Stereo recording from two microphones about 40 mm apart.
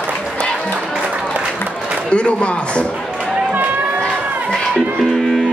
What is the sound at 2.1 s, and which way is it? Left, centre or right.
Speech, left.